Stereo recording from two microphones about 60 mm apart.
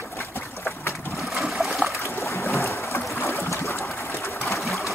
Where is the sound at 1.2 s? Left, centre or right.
Centre.